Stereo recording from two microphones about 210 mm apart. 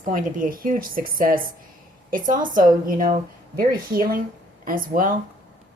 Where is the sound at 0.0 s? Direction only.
40° right (ahead or behind).